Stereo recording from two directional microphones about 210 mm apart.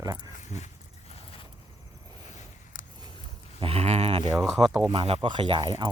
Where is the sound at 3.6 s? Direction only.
25° right (ahead or behind).